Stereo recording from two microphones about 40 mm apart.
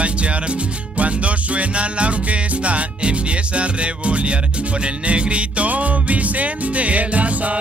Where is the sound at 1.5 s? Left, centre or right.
Right.